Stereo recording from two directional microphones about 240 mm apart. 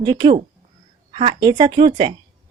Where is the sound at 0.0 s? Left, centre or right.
Centre.